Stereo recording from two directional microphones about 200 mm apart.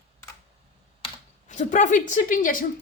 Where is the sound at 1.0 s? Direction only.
35° left (ahead or behind).